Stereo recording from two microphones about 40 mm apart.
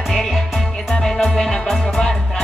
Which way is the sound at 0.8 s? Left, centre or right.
Centre.